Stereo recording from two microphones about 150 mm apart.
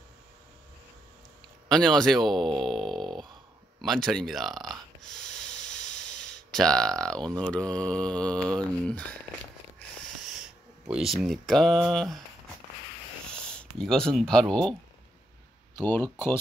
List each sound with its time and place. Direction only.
1.7 s speech: 5° left (ahead or behind)
2.6 s a sound: 5° left (ahead or behind)
3.8 s speech: centre (ahead or behind)
5.3 s a sound: 5° left (ahead or behind)
7.2 s speech: 25° right (ahead or behind)
7.5 s mantra: 5° left (ahead or behind)
9.8 s a sound: 5° right (ahead or behind)
13.5 s speech: 5° left (ahead or behind)
15.8 s mantra: 10° left (ahead or behind)